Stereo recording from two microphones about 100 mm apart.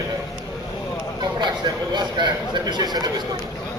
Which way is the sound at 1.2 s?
45° right (ahead or behind).